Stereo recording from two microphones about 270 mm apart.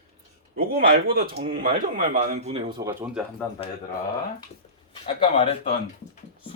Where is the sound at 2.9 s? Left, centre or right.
Centre.